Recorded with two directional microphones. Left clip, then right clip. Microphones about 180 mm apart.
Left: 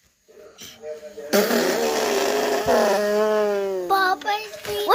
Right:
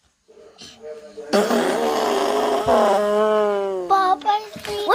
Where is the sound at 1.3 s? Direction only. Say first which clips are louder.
Right 1 dB; 20° left (ahead or behind).